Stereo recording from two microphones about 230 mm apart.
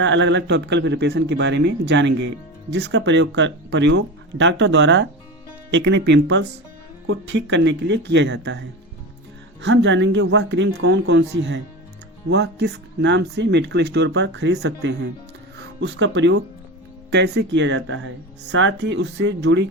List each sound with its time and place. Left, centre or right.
0.0 s speech: right
9.6 s speech: right